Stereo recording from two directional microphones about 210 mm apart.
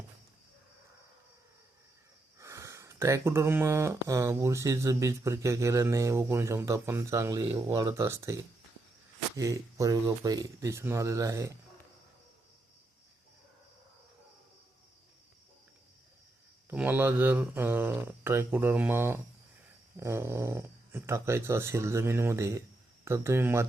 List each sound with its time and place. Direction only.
2.4 s speech: 15° right (ahead or behind)
16.6 s speech: 10° right (ahead or behind)